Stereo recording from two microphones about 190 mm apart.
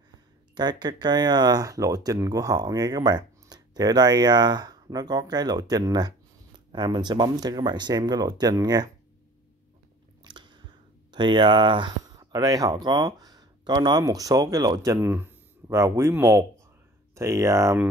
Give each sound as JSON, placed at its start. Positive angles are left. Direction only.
{"t": 0.6, "sound": "speech", "side_deg": -20}
{"t": 10.2, "sound": "biting", "side_deg": -25}
{"t": 11.1, "sound": "speech", "side_deg": -25}